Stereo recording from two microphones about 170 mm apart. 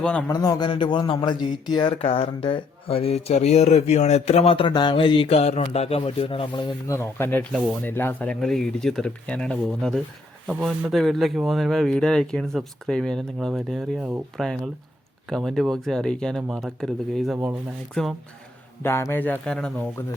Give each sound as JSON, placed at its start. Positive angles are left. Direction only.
{"t": 0.0, "sound": "speech", "side_deg": 5}
{"t": 0.3, "sound": "a man's voice", "side_deg": 25}